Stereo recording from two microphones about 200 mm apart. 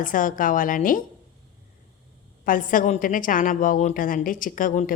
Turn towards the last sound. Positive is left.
turn(degrees=40)  # may be behind; listen again after turning